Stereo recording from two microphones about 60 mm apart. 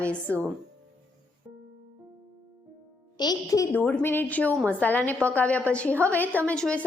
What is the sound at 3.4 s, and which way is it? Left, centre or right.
Speech, left.